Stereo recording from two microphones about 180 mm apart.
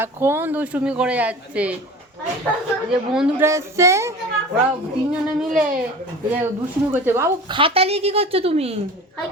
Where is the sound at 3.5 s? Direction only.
15° right (ahead or behind).